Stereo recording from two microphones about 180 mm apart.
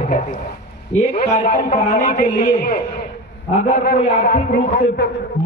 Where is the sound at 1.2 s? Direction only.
45° left (ahead or behind).